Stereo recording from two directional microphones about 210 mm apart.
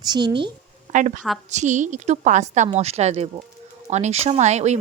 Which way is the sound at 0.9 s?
35° right (ahead or behind).